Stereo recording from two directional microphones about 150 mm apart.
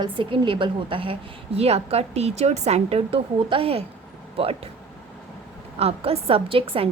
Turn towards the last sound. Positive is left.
turn(degrees=-40)  # may be behind; listen again after turning